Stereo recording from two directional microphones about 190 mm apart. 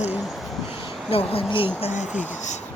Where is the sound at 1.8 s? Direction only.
40° left (ahead or behind).